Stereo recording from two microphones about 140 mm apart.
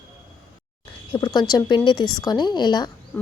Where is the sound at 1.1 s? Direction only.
30° left (ahead or behind).